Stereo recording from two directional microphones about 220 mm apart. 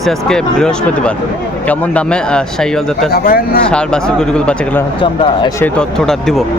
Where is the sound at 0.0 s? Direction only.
Centre (ahead or behind).